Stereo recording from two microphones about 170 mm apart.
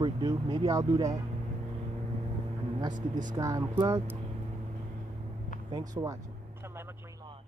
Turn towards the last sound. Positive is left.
turn(degrees=-20)  # may be behind; listen again after turning